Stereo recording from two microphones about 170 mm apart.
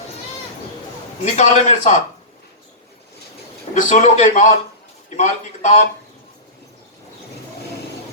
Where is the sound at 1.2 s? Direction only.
40° left (ahead or behind).